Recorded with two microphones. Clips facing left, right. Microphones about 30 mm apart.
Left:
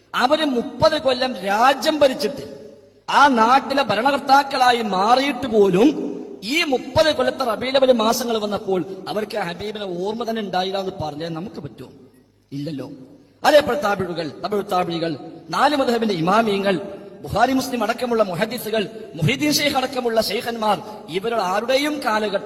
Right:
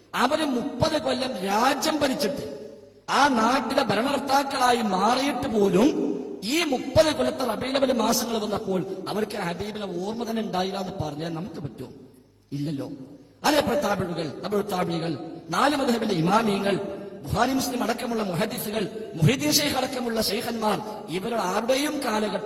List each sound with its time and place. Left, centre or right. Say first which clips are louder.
0.1 s a man's voice: left 5 dB; left
8.2 s a man's voice: left 5 dB; left